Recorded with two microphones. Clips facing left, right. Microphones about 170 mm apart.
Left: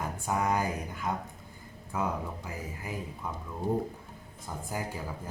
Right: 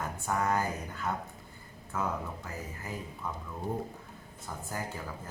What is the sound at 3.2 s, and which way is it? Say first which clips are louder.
Speech: right 1 dB; 10° left (ahead or behind).